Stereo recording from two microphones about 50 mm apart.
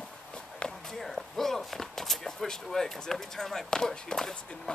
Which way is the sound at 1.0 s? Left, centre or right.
Centre.